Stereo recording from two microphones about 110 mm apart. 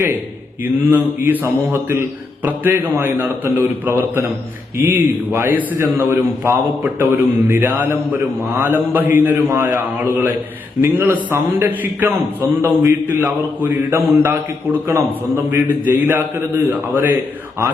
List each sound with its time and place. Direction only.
0.6 s a man's voice: 20° right (ahead or behind)